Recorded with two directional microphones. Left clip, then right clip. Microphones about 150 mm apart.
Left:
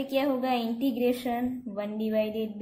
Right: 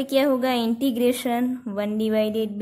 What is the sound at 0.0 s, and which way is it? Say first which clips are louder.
Speech: right 7 dB; 55° right (ahead or behind).